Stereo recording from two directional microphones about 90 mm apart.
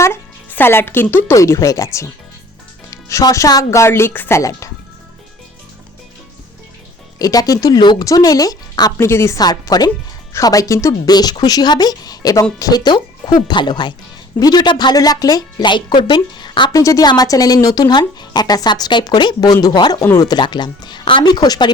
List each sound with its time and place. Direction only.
0.5 s speech: 25° left (ahead or behind)
4.4 s speech: 35° left (ahead or behind)
7.2 s speech: 45° left (ahead or behind)
9.0 s speech: 30° left (ahead or behind)
9.4 s speech: 50° left (ahead or behind)
11.1 s speech: 50° left (ahead or behind)
16.7 s speech: 35° left (ahead or behind)